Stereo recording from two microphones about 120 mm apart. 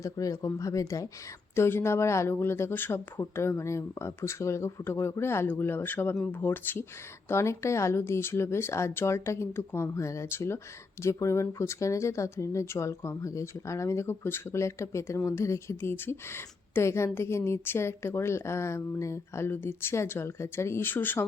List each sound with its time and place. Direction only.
0.0 s speech: 25° left (ahead or behind)